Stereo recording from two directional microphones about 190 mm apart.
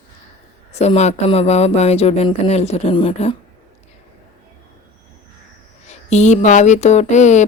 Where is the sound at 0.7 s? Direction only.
35° left (ahead or behind).